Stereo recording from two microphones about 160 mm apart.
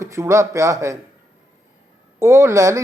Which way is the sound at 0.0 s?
20° right (ahead or behind).